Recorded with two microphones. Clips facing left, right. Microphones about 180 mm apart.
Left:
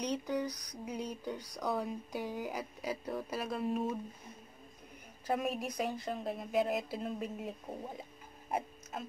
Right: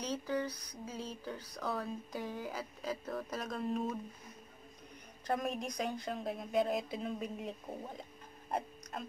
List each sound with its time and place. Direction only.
0.0 s speech: 15° left (ahead or behind)
5.2 s a woman's voice: 5° left (ahead or behind)
8.0 s a sound: 5° left (ahead or behind)